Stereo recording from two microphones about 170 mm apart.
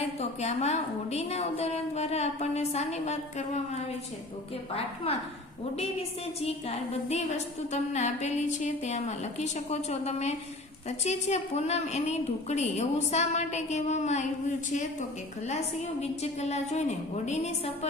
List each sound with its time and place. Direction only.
0.0 s a woman's voice: 40° left (ahead or behind)
5.1 s a woman's voice: 35° left (ahead or behind)
16.0 s a woman's voice: 40° left (ahead or behind)